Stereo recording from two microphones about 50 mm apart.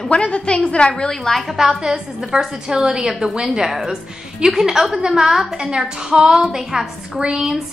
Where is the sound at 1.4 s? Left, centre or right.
Centre.